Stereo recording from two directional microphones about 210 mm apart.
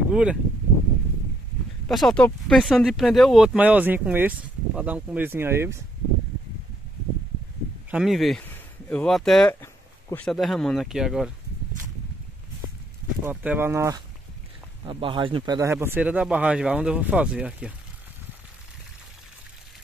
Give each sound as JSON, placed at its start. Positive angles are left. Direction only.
{"t": 0.1, "sound": "speech", "side_deg": -5}
{"t": 1.9, "sound": "speech", "side_deg": 0}
{"t": 7.9, "sound": "speech", "side_deg": 0}
{"t": 13.2, "sound": "speech", "side_deg": -10}